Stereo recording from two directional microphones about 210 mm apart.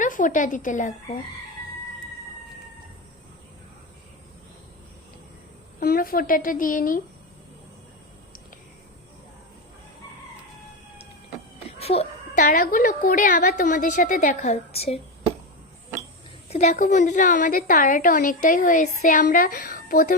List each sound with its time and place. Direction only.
0.0 s a woman's voice: 40° left (ahead or behind)
5.8 s a woman's voice: 45° left (ahead or behind)
11.8 s a woman's voice: 30° left (ahead or behind)
16.5 s a woman's voice: 30° left (ahead or behind)